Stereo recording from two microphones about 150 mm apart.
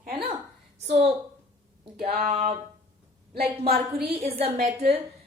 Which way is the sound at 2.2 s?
45° right (ahead or behind).